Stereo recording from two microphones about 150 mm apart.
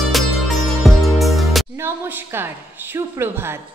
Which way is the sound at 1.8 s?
15° right (ahead or behind).